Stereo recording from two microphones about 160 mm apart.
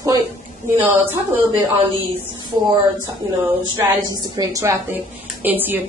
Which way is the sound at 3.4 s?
15° right (ahead or behind).